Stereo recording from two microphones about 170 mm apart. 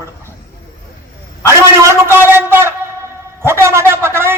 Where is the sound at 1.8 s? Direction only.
15° right (ahead or behind).